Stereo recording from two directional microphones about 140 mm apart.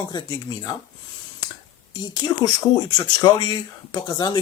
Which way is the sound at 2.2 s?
30° left (ahead or behind).